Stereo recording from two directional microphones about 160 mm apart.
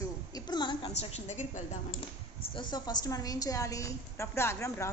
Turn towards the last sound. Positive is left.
turn(degrees=15)  # may be behind; listen again after turning